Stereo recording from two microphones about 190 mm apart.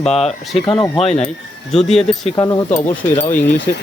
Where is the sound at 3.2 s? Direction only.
10° left (ahead or behind).